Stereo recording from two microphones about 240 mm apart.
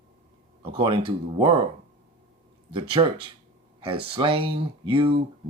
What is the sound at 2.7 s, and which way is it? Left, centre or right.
Speech, right.